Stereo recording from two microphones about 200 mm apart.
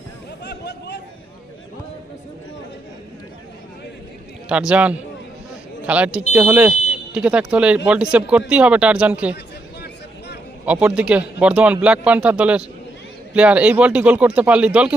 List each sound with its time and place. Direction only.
0.4 s chatter: 60° left (ahead or behind)
4.4 s speech: 5° right (ahead or behind)
10.7 s speech: 5° right (ahead or behind)